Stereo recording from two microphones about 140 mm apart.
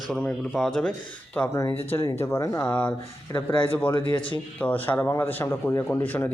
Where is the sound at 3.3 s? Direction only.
25° left (ahead or behind).